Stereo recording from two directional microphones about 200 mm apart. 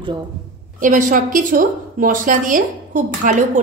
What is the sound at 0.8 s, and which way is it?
A woman's voice, 40° right (ahead or behind).